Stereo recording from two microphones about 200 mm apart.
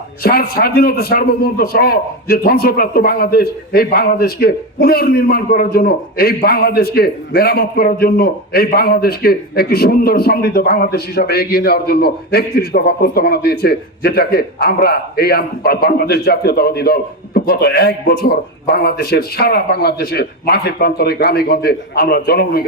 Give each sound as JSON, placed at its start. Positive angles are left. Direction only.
{"t": 0.2, "sound": "a man's voice", "side_deg": 50}